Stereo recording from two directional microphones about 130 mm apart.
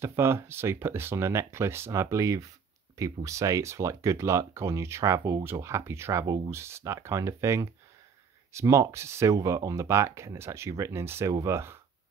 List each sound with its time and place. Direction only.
0.0 s speech: 20° right (ahead or behind)